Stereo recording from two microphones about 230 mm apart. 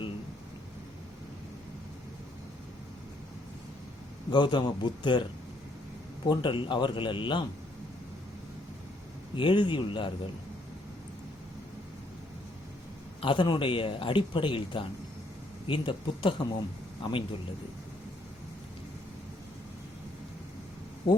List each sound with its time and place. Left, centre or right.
4.3 s speech: centre
9.3 s speech: left
13.2 s speech: left
21.0 s speech: left